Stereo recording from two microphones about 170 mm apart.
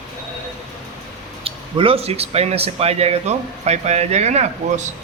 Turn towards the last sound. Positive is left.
turn(degrees=-40)  # may be behind; listen again after turning